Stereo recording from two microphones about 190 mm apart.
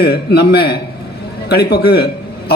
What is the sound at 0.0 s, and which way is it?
A man's voice, 55° left (ahead or behind).